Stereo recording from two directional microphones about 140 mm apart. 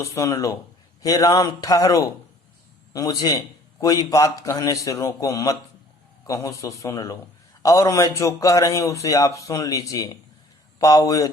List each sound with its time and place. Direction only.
0.0 s a man's voice: 20° left (ahead or behind)